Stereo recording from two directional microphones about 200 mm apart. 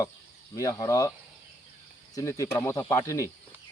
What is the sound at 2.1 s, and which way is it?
A man's voice, 15° left (ahead or behind).